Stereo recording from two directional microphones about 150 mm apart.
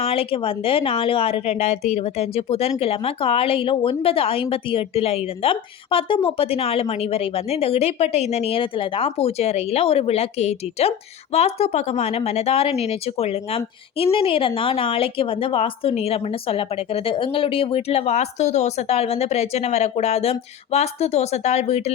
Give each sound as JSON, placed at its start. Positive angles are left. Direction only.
{"t": 0.0, "sound": "a woman's voice", "side_deg": 40}